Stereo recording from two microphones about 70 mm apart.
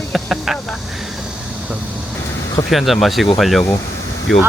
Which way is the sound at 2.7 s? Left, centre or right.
Centre.